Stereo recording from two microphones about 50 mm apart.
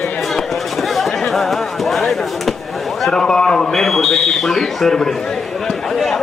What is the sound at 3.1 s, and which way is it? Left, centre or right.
A man's voice, centre.